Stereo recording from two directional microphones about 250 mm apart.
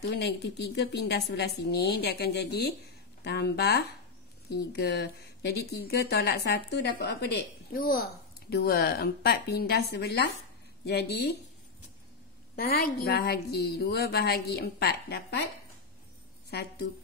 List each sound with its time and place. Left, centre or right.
0.1 s speech: left
12.5 s speech: left
16.4 s a woman's voice: left